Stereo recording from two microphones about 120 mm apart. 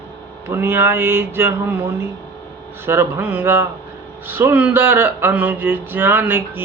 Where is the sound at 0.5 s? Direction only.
20° right (ahead or behind).